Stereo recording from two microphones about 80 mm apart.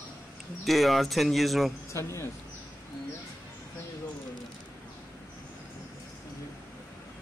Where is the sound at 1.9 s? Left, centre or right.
Left.